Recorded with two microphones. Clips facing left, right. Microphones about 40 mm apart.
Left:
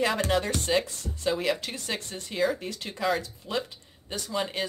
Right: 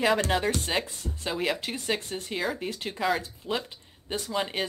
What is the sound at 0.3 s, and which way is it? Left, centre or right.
Speech, centre.